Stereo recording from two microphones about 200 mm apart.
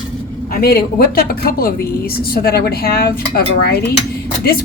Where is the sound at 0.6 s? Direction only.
50° left (ahead or behind).